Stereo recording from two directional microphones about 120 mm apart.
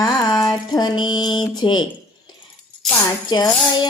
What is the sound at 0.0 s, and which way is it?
Speech, 35° left (ahead or behind).